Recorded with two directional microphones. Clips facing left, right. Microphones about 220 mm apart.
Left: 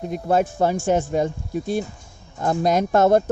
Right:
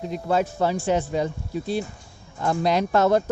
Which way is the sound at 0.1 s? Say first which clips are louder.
Left 3 dB; 50° left (ahead or behind).